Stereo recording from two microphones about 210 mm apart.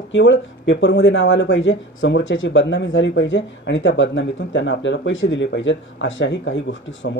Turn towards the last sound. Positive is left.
turn(degrees=65)  # may be behind; listen again after turning